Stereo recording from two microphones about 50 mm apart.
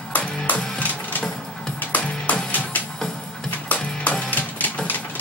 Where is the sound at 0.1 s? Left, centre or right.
Left.